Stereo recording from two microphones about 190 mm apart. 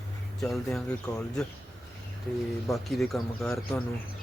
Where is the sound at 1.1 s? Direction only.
20° left (ahead or behind).